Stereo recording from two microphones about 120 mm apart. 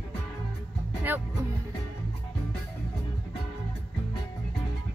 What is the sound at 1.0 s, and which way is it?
Speech, 15° right (ahead or behind).